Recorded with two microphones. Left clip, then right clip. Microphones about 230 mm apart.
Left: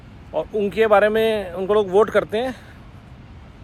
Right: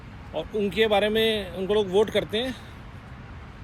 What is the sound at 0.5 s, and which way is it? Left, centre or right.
Speech, left.